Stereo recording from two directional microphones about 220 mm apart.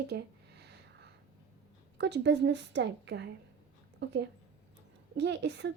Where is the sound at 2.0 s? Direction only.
50° right (ahead or behind).